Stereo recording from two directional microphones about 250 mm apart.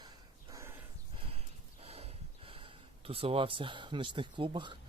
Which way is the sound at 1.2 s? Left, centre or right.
Right.